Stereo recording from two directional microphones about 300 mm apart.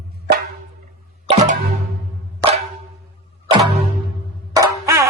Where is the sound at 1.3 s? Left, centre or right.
Right.